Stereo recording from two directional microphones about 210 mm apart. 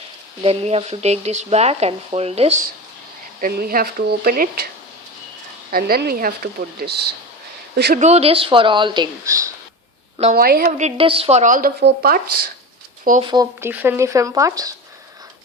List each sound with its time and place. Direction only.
0.4 s speech: 30° right (ahead or behind)
3.4 s a woman's voice: 45° right (ahead or behind)
5.7 s a woman's voice: 45° right (ahead or behind)
7.9 s speech: 30° right (ahead or behind); by 9.5 s 15° right (ahead or behind)
10.3 s speech: 45° right (ahead or behind)
13.2 s speech: 20° right (ahead or behind)